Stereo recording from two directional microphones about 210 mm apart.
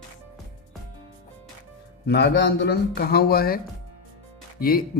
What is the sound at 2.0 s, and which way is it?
Speech, 50° left (ahead or behind).